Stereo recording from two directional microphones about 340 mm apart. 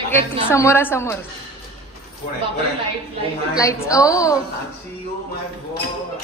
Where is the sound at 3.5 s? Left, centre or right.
Centre.